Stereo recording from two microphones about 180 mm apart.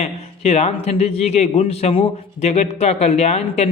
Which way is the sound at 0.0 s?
35° left (ahead or behind).